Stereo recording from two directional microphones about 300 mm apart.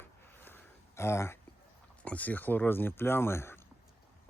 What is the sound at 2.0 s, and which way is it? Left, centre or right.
Speech, centre.